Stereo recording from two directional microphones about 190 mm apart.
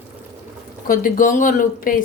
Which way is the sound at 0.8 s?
45° left (ahead or behind).